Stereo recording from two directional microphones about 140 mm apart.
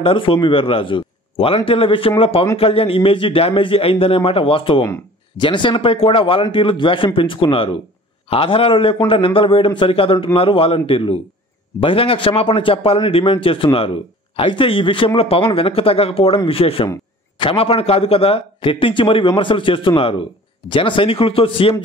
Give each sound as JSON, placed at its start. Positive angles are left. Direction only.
{"t": 0.0, "sound": "a man's voice", "side_deg": 40}